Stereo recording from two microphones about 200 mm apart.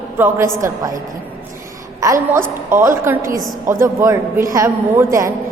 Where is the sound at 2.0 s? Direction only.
15° right (ahead or behind).